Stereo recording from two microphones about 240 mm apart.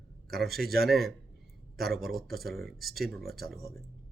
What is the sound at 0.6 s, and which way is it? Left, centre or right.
Speech, right.